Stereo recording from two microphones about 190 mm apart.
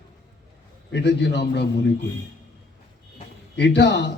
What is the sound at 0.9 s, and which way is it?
Speech, 65° left (ahead or behind).